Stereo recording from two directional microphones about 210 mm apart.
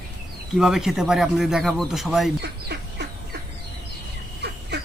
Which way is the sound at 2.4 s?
55° right (ahead or behind).